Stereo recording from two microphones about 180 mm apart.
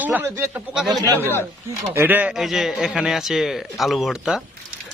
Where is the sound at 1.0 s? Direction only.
20° right (ahead or behind).